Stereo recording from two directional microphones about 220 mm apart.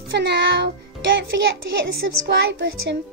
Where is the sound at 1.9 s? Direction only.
50° right (ahead or behind).